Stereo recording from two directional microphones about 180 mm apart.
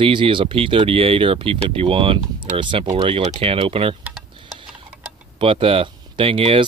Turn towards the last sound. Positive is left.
turn(degrees=-30)  # may be behind; listen again after turning